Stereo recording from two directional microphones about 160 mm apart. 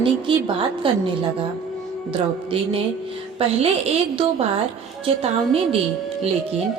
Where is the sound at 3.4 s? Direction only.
40° right (ahead or behind).